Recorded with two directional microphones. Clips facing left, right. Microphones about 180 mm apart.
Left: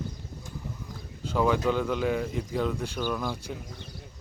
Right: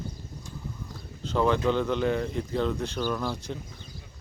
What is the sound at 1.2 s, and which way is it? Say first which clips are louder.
Speech: right 1 dB; 5° left (ahead or behind).